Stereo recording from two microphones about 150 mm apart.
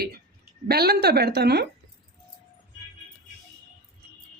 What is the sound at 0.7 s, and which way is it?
Speech, 90° right.